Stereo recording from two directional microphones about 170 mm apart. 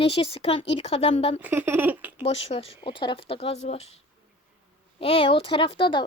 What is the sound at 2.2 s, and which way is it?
Speech, 35° left (ahead or behind).